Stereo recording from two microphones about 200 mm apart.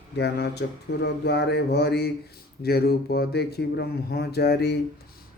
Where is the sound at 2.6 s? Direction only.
50° left (ahead or behind).